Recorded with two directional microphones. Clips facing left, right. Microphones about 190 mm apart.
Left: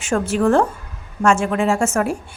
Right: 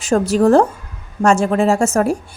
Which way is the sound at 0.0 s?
35° right (ahead or behind).